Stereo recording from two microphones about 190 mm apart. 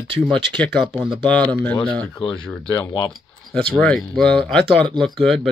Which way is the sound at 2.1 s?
25° left (ahead or behind).